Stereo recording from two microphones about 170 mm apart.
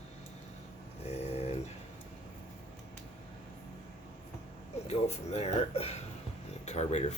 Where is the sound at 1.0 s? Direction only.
40° left (ahead or behind).